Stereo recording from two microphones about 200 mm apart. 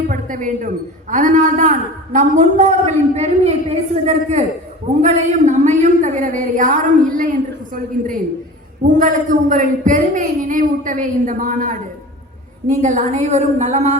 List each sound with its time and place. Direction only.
0.1 s a woman's voice: 40° right (ahead or behind)
12.8 s a woman's voice: 40° right (ahead or behind)